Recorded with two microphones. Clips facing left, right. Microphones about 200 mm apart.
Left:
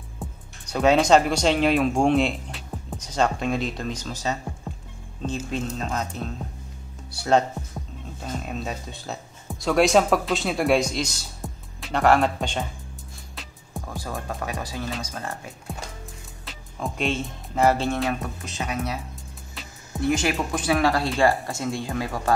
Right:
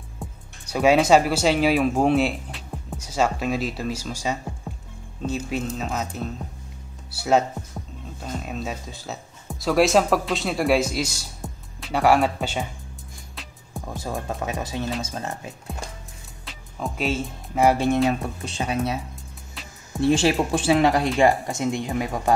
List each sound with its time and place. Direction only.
0.2 s speech: 5° right (ahead or behind)
4.7 s music: 5° right (ahead or behind)
5.5 s speech: 5° right (ahead or behind)
13.8 s music: 20° right (ahead or behind)
14.2 s speech: 20° right (ahead or behind)
16.4 s speech: centre (ahead or behind)
18.4 s speech: 30° right (ahead or behind)
20.0 s speech: 30° right (ahead or behind)